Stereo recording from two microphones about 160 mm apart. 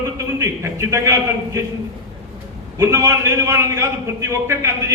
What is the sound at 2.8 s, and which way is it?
A man's voice, 15° right (ahead or behind).